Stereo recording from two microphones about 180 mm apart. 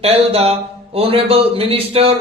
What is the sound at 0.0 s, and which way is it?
A man's voice, 35° right (ahead or behind).